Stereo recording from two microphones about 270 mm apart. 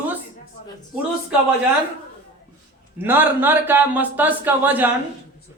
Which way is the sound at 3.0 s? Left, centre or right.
Centre.